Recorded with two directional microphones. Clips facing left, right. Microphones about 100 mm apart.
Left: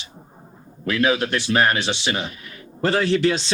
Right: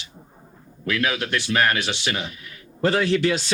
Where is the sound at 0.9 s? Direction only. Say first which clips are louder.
Left 4 dB; 30° left (ahead or behind).